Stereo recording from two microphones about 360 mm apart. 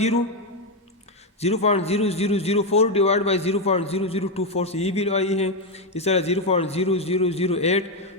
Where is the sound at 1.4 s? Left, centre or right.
Centre.